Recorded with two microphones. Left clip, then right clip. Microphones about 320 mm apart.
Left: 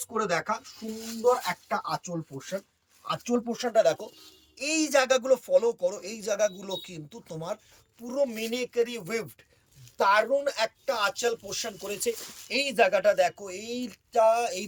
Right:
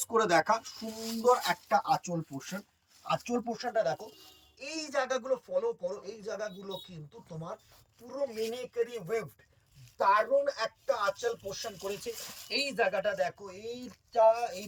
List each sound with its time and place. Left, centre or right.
0.0 s speech: centre
1.6 s speech: centre